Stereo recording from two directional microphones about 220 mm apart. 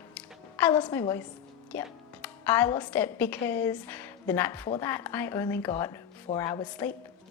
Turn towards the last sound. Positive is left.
turn(degrees=20)  # may be behind; listen again after turning